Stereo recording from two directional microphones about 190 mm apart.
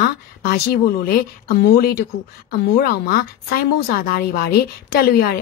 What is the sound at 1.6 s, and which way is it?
Speech, 55° left (ahead or behind).